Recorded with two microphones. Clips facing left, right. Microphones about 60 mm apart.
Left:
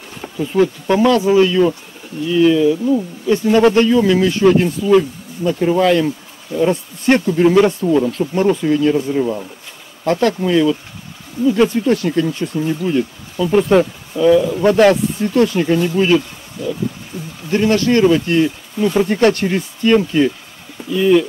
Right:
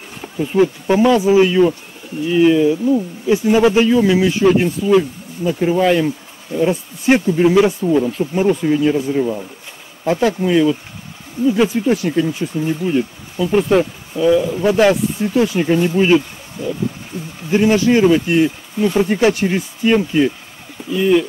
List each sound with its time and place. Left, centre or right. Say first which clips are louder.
0.4 s speech: even; centre
2.8 s speech: even; centre
3.3 s speech: left 1 dB; centre
15.8 s speech: right 1 dB; centre
17.5 s speech: right 1 dB; centre